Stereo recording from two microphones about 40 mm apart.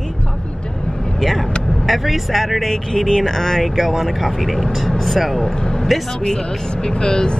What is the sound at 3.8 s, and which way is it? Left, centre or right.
Speech, centre.